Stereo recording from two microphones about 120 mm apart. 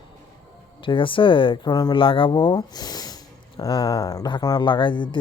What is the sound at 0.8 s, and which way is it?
Speech, 45° left (ahead or behind).